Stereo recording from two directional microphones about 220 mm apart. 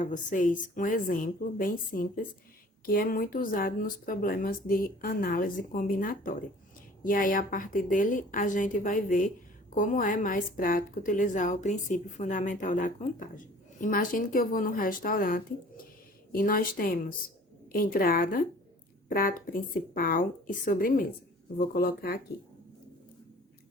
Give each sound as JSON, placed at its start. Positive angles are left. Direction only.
{"t": 0.0, "sound": "a woman's voice", "side_deg": 35}